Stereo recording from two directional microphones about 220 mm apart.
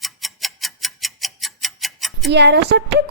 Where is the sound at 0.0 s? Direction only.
Centre (ahead or behind).